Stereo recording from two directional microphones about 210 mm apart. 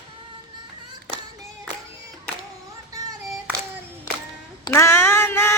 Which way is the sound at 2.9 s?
15° right (ahead or behind).